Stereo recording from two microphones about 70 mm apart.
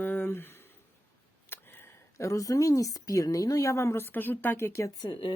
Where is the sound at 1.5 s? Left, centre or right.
Left.